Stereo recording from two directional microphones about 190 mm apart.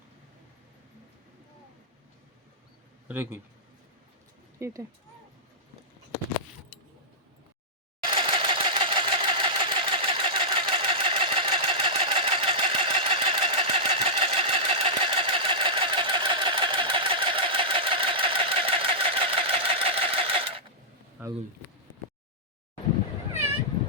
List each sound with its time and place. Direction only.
3.1 s a man's voice: 10° right (ahead or behind)
4.6 s a man's voice: 15° right (ahead or behind)
8.1 s sewing machine: 25° right (ahead or behind)